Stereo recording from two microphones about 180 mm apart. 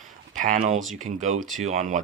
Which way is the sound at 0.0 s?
45° right (ahead or behind).